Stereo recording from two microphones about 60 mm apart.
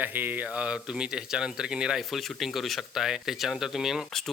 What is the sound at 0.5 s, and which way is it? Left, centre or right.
Speech, centre.